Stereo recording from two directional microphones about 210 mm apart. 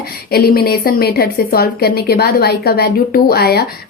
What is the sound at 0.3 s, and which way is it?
A woman's voice, 45° left (ahead or behind).